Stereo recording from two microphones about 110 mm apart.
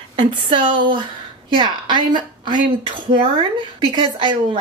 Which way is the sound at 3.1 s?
50° right (ahead or behind).